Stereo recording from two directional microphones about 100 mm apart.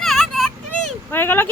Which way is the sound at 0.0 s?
5° left (ahead or behind).